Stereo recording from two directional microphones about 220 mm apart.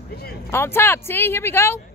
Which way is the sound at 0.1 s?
45° left (ahead or behind).